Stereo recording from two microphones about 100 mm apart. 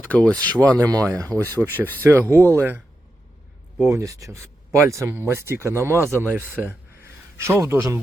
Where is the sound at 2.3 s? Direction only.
20° left (ahead or behind).